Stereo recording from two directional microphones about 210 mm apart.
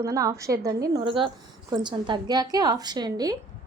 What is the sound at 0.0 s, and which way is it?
A woman's voice, 15° right (ahead or behind).